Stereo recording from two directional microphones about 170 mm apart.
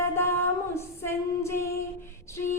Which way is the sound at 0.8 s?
15° left (ahead or behind).